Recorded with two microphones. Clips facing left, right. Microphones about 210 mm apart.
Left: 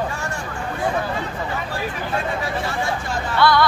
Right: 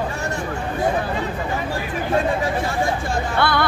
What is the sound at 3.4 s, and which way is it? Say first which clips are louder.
Music: left 4 dB; 55° right (ahead or behind).